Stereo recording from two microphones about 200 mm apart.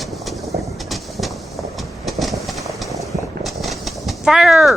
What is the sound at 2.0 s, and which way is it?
Train, centre (ahead or behind).